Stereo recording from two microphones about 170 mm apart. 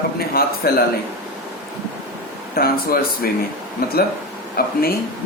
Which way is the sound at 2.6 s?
60° left (ahead or behind).